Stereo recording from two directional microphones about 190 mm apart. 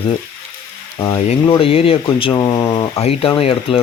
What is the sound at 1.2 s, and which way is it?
Speech, 30° left (ahead or behind).